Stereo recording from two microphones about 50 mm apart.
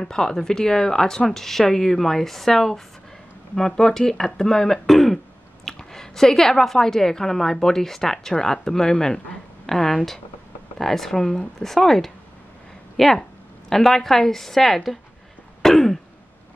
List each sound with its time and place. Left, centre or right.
0.0 s a woman's voice: centre
15.6 s throat clearing: centre